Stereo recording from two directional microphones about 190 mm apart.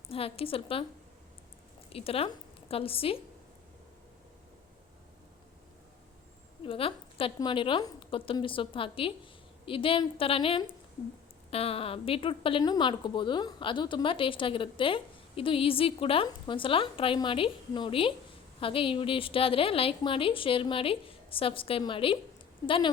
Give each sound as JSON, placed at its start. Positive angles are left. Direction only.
{"t": 0.1, "sound": "a woman's voice", "side_deg": 30}
{"t": 1.9, "sound": "a woman's voice", "side_deg": 30}
{"t": 6.7, "sound": "a woman's voice", "side_deg": 30}